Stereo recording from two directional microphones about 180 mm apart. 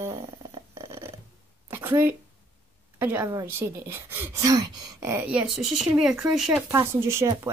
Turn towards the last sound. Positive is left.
turn(degrees=-15)  # may be behind; listen again after turning